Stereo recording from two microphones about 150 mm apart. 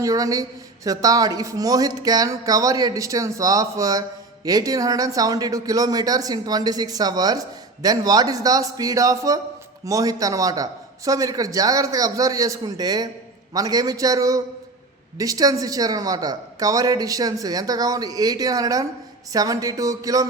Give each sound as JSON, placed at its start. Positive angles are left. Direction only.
{"t": 0.0, "sound": "speech", "side_deg": -25}